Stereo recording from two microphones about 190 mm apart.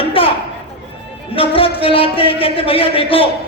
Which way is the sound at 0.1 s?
30° left (ahead or behind).